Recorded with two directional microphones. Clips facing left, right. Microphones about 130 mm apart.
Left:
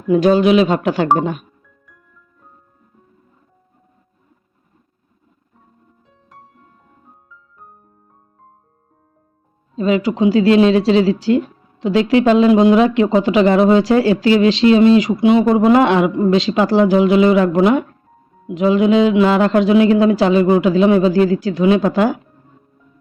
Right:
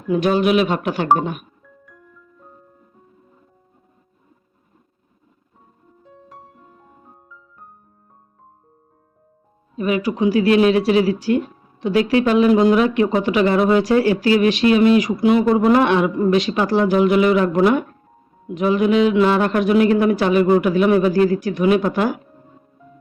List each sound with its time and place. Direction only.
0.1 s speech: 30° left (ahead or behind)
6.1 s music: centre (ahead or behind)
9.7 s speech: 25° left (ahead or behind)